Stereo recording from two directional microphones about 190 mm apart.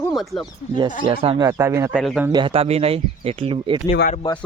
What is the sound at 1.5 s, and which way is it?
Speech, 15° right (ahead or behind).